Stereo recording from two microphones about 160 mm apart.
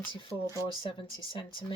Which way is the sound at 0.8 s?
30° left (ahead or behind).